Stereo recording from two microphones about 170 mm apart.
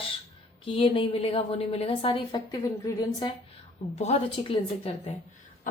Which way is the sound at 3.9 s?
40° left (ahead or behind).